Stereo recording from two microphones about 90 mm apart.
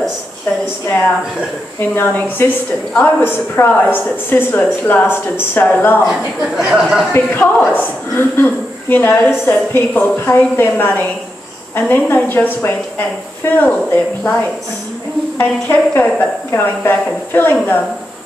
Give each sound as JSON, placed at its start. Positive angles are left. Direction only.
{"t": 0.8, "sound": "a woman's voice", "side_deg": 25}
{"t": 2.4, "sound": "a woman's voice", "side_deg": 25}
{"t": 6.5, "sound": "speech", "side_deg": -5}
{"t": 7.1, "sound": "a woman's voice", "side_deg": 20}
{"t": 15.3, "sound": "a woman's voice", "side_deg": 25}